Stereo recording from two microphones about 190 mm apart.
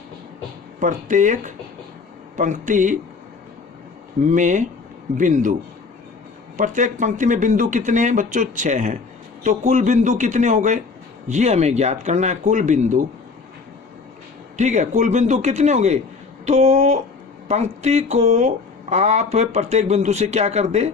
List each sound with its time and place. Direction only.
0.8 s speech: 40° right (ahead or behind)
4.2 s speech: 40° right (ahead or behind)
6.6 s speech: 40° right (ahead or behind)
14.5 s speech: 40° right (ahead or behind)